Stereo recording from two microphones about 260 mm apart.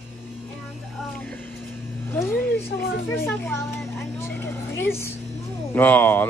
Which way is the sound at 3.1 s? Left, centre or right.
Centre.